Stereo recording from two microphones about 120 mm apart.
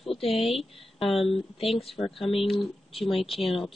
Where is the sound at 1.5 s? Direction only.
55° left (ahead or behind).